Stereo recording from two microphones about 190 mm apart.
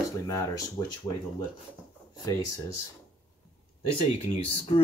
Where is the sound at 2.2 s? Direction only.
20° left (ahead or behind).